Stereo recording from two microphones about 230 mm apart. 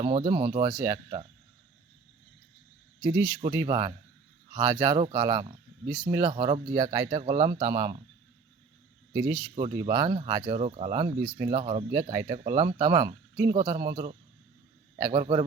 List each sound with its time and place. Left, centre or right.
0.0 s speech: right
3.0 s speech: centre
9.1 s speech: centre